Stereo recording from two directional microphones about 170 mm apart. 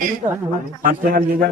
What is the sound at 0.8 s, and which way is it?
Speech, 55° right (ahead or behind).